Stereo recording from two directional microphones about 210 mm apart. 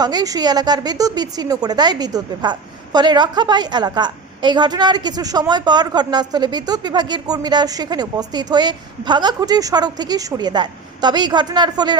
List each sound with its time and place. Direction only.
0.0 s a woman's voice: 20° right (ahead or behind)